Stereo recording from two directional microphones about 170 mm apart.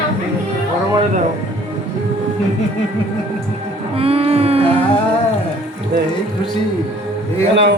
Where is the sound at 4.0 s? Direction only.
35° right (ahead or behind).